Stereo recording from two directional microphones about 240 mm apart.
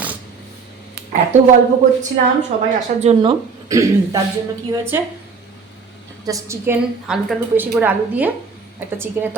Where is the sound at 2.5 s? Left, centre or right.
Right; by 5.1 s centre.